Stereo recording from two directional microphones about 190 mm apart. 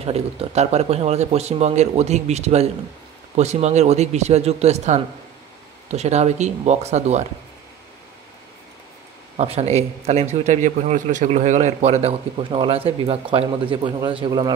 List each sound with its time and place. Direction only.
0.0 s a man's voice: 30° right (ahead or behind)
9.4 s a man's voice: 35° right (ahead or behind)